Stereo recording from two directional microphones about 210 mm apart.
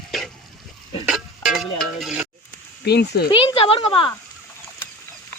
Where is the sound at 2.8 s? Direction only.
50° left (ahead or behind).